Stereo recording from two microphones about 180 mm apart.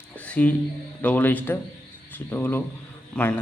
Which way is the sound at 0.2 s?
10° left (ahead or behind).